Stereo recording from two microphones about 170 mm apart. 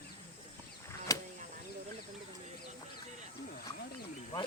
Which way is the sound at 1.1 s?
20° left (ahead or behind).